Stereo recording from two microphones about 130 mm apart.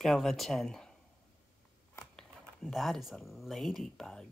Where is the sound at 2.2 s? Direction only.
Centre (ahead or behind).